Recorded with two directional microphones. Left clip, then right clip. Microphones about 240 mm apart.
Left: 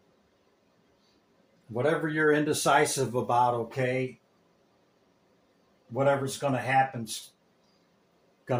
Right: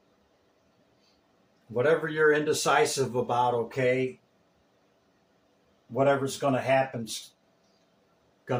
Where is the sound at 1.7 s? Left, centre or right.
Left.